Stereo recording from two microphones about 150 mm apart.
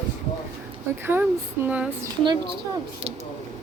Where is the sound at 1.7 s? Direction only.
10° right (ahead or behind).